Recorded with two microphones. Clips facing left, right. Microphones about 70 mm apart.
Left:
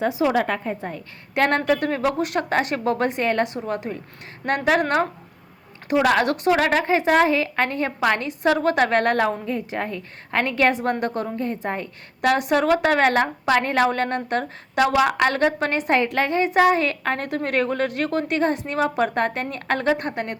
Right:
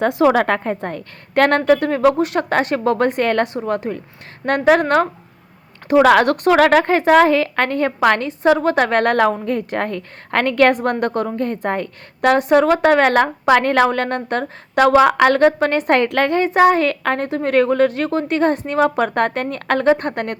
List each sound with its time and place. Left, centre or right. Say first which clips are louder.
0.0 s a woman's voice: right 6 dB; right
1.4 s speech: right 5 dB; right
1.6 s a woman's voice: right 7 dB; right
3.7 s a woman's voice: right 6 dB; right
6.0 s speech: right 7 dB; right
8.3 s a woman's voice: right 5 dB; right
9.5 s a woman's voice: right 6 dB; right
12.2 s a woman's voice: right 6 dB; right